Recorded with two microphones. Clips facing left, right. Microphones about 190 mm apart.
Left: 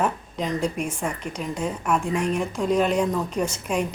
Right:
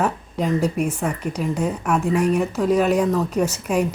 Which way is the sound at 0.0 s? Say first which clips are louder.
Right 3 dB; 5° right (ahead or behind).